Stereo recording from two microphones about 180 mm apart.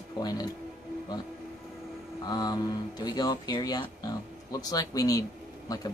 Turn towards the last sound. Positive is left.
turn(degrees=20)  # may be behind; listen again after turning